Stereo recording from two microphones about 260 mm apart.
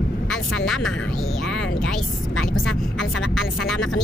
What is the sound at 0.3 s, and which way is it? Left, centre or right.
Speech, centre.